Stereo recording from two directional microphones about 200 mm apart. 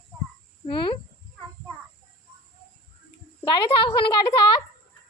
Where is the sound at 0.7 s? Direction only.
25° left (ahead or behind).